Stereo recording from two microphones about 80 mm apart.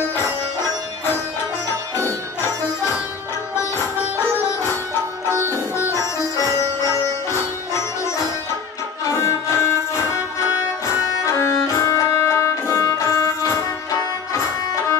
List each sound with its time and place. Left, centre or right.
9.1 s music: left
11.2 s music: left